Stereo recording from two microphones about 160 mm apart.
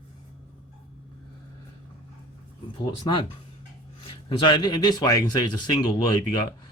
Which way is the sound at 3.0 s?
30° left (ahead or behind).